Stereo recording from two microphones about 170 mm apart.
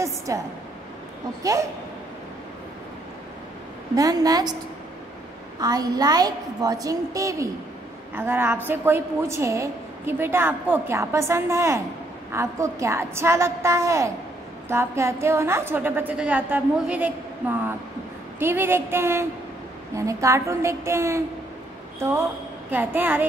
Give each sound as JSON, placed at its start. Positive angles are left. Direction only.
{"t": 0.3, "sound": "a woman's voice", "side_deg": -15}
{"t": 3.9, "sound": "a woman's voice", "side_deg": -20}
{"t": 5.6, "sound": "a woman's voice", "side_deg": -20}
{"t": 22.7, "sound": "a woman's voice", "side_deg": -10}